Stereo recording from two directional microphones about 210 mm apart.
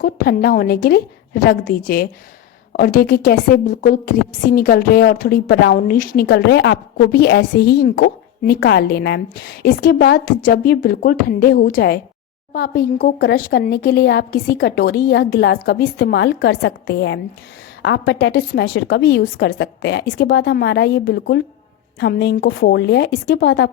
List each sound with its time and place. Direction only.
0.0 s a woman's voice: 45° left (ahead or behind)